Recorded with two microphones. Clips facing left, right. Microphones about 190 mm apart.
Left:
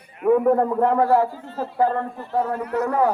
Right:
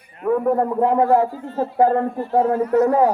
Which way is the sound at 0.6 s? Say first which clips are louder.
Right 1 dB; 5° right (ahead or behind).